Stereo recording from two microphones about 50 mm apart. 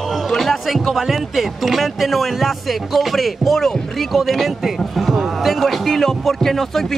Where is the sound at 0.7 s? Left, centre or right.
Centre.